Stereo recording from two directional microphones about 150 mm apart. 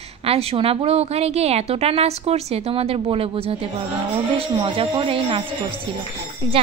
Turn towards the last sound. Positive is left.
turn(degrees=-35)  # may be behind; listen again after turning